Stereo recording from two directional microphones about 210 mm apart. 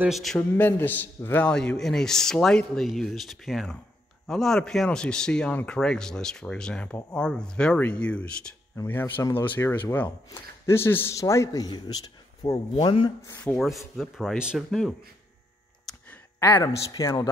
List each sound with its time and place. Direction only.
0.0 s a man's voice: centre (ahead or behind); by 13.4 s 20° left (ahead or behind)
13.4 s speech: 5° left (ahead or behind)
15.9 s a sound: 10° left (ahead or behind)
16.7 s a man's voice: 15° left (ahead or behind)